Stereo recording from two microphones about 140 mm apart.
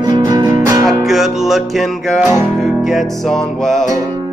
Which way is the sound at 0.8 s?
Centre (ahead or behind).